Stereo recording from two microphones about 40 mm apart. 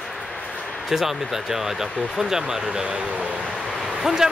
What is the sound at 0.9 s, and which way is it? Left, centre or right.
Speech, centre.